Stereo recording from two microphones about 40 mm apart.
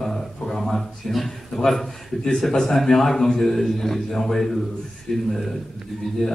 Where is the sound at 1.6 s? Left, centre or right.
Centre.